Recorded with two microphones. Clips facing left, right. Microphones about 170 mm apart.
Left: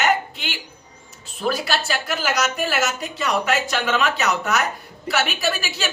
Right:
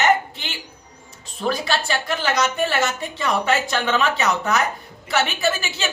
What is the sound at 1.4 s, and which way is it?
A woman's voice, 5° left (ahead or behind).